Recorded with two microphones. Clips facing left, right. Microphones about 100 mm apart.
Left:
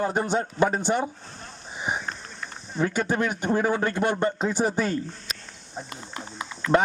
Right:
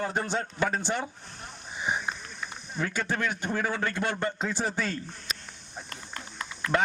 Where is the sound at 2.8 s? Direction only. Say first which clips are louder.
Left 5 dB; 20° left (ahead or behind).